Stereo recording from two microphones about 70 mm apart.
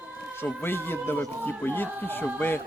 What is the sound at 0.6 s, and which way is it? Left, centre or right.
Speech, left.